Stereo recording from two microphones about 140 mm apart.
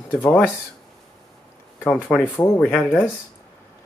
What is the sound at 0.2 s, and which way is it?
Speech, 15° left (ahead or behind).